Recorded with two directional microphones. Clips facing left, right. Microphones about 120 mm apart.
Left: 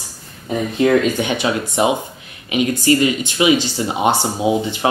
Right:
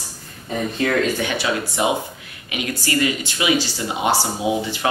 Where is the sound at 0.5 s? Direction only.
15° left (ahead or behind).